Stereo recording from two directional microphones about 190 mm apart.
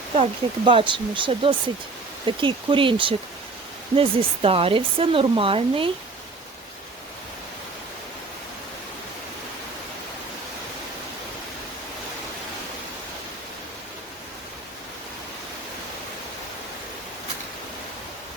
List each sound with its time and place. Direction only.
0.2 s speech: 30° right (ahead or behind)